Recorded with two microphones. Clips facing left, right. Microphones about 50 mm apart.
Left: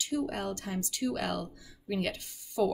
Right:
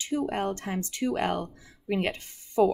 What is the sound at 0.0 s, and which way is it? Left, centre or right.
Speech, right.